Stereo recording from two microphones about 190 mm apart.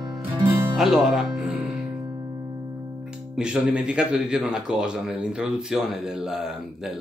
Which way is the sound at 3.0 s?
5° right (ahead or behind).